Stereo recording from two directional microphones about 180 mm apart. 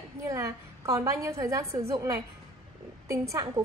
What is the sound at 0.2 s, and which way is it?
A woman's voice, 15° right (ahead or behind).